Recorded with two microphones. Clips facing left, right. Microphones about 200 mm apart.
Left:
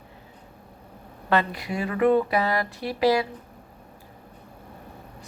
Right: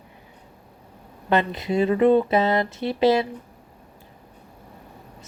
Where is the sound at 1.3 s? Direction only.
20° right (ahead or behind).